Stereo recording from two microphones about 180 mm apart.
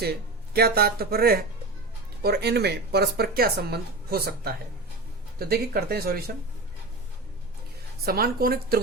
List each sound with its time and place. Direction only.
0.0 s speech: 60° right (ahead or behind)
8.0 s speech: 55° right (ahead or behind)